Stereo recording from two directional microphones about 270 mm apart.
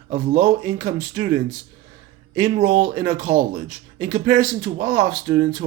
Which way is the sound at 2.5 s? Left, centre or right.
Right.